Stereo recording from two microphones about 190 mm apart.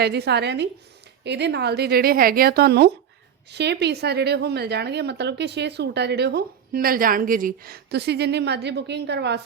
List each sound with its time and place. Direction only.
0.0 s a woman's voice: 60° right (ahead or behind)